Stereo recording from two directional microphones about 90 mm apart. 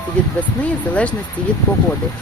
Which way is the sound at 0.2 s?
10° left (ahead or behind).